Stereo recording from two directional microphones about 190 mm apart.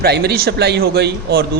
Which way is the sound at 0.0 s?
55° right (ahead or behind).